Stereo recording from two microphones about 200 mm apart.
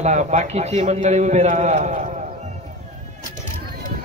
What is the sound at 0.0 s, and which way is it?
A man's voice, 35° right (ahead or behind).